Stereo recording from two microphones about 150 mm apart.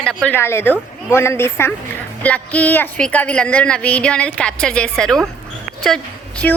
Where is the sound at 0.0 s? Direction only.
5° left (ahead or behind).